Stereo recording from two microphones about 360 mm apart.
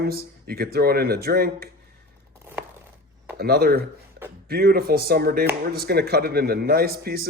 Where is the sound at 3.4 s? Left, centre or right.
Right.